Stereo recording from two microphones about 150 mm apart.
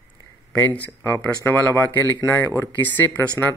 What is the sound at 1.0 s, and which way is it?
Speech, 15° left (ahead or behind).